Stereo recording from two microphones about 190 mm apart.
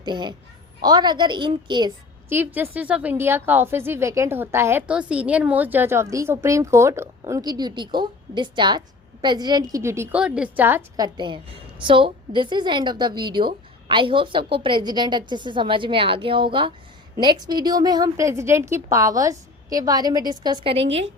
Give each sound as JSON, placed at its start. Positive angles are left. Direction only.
{"t": 0.0, "sound": "a woman's voice", "side_deg": -25}
{"t": 2.3, "sound": "a woman's voice", "side_deg": -10}